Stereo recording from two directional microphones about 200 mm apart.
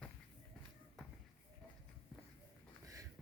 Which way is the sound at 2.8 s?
15° right (ahead or behind).